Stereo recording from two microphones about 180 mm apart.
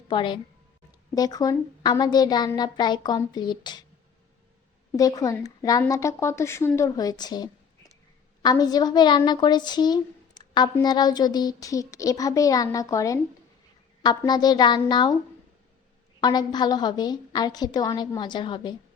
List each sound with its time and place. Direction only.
0.1 s a woman's voice: 25° left (ahead or behind)
4.9 s a woman's voice: 20° left (ahead or behind)
16.2 s a woman's voice: 20° left (ahead or behind)